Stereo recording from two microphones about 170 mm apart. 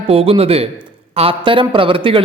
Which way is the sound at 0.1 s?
35° right (ahead or behind).